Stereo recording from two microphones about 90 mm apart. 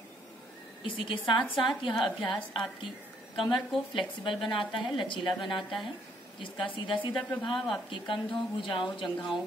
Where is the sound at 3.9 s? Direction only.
65° left (ahead or behind).